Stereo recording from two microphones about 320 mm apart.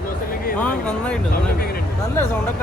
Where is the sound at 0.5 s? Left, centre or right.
Centre.